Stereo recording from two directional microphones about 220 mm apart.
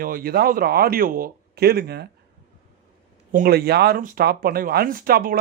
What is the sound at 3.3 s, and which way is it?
A man's voice, 45° right (ahead or behind).